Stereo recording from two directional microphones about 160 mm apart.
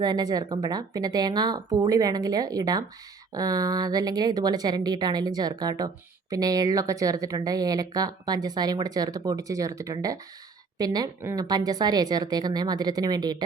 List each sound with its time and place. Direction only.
0.0 s speech: 25° right (ahead or behind)